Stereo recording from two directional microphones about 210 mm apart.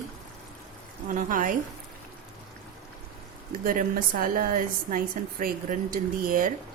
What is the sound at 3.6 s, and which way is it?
A woman's voice, 40° right (ahead or behind).